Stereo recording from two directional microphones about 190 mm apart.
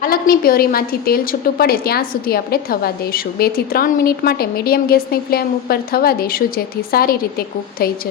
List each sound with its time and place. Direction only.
0.0 s a woman's voice: 50° left (ahead or behind)